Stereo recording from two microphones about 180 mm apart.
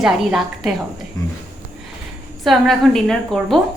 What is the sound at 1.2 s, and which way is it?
Speech, 20° left (ahead or behind).